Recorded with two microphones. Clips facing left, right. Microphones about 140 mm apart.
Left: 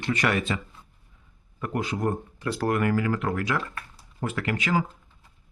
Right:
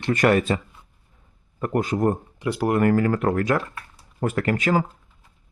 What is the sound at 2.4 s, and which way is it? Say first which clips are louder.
Speech: right 2 dB; 15° right (ahead or behind).